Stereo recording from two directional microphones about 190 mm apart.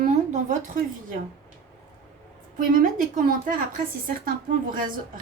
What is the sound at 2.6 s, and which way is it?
A woman's voice, 45° right (ahead or behind).